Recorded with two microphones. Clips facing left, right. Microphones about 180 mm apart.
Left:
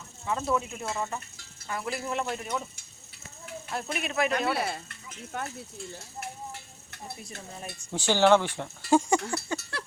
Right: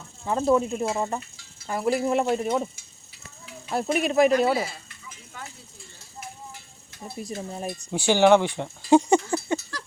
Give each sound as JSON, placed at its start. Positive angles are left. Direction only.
{"t": 0.3, "sound": "speech", "side_deg": -30}
{"t": 1.6, "sound": "speech", "side_deg": -40}
{"t": 3.7, "sound": "speech", "side_deg": -35}
{"t": 4.5, "sound": "speech", "side_deg": 60}
{"t": 6.1, "sound": "a sound", "side_deg": 60}
{"t": 7.2, "sound": "speech", "side_deg": -40}
{"t": 7.9, "sound": "speech", "side_deg": -15}
{"t": 9.6, "sound": "a sound", "side_deg": 65}